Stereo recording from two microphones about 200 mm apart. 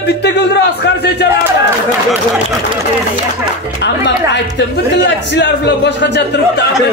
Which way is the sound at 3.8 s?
60° left (ahead or behind).